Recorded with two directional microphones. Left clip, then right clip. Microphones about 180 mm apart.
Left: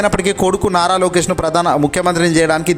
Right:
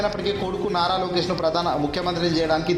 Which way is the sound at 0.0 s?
45° left (ahead or behind).